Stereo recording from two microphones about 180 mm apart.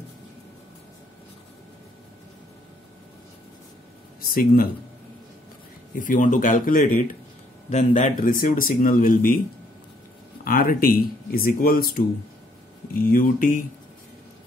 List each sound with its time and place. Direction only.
4.2 s speech: 55° left (ahead or behind)
5.9 s speech: 45° left (ahead or behind)
10.4 s speech: 50° left (ahead or behind)
13.1 s speech: 50° left (ahead or behind)